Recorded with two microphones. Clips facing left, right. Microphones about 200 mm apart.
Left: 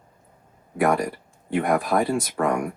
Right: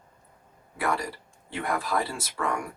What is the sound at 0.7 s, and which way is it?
Speech, 55° left (ahead or behind).